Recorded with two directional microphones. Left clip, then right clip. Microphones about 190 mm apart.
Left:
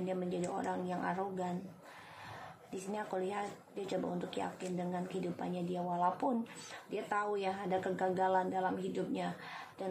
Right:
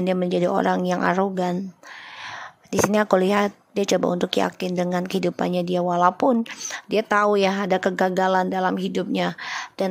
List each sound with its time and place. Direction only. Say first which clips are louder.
0.0 s a woman's voice: right 16 dB; 60° right (ahead or behind)
2.9 s a woman's voice: right 18 dB; 60° right (ahead or behind)